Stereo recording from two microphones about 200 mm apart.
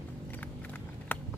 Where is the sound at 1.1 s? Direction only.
10° left (ahead or behind).